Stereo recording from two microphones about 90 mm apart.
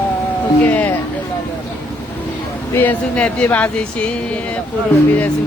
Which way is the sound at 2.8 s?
15° left (ahead or behind).